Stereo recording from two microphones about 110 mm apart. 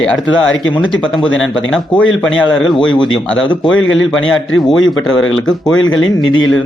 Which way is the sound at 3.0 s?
45° left (ahead or behind).